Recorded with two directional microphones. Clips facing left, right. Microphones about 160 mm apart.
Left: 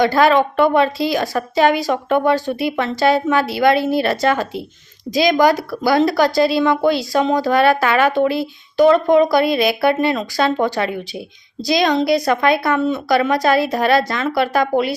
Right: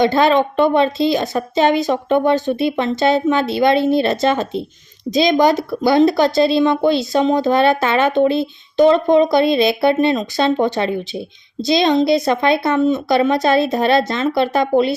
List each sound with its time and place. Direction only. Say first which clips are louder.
0.0 s a woman's voice: even; 25° right (ahead or behind)